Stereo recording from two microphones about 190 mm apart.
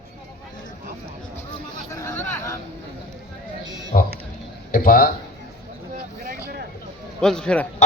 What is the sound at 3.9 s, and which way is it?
Speech, 45° left (ahead or behind).